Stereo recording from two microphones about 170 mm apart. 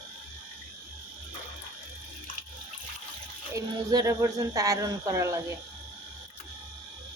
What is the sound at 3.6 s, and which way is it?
Speech, 20° right (ahead or behind).